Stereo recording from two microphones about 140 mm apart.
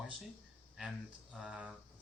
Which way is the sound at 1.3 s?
5° right (ahead or behind).